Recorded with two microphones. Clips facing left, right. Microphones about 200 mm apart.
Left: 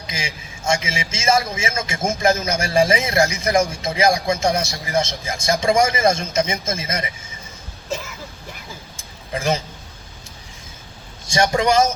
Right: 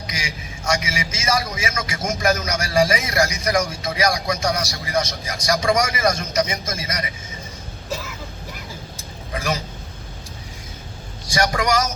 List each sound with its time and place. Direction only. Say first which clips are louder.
0.1 s a man's voice: left 4 dB; 25° left (ahead or behind)
9.3 s a man's voice: left 4 dB; 25° left (ahead or behind)
11.3 s a man's voice: left 3 dB; 25° left (ahead or behind)